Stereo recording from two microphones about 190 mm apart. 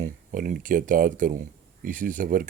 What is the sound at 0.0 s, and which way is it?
Speech, 45° right (ahead or behind).